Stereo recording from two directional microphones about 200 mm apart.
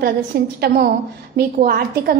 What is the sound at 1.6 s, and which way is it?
Speech, 50° right (ahead or behind).